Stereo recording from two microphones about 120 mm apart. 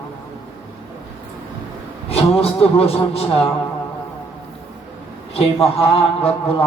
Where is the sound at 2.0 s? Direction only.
55° left (ahead or behind).